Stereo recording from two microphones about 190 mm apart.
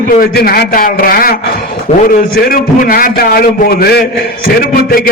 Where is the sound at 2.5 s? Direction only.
50° left (ahead or behind).